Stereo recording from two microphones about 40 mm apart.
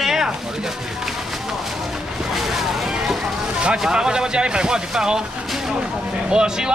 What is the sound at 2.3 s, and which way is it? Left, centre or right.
Vehicle, centre.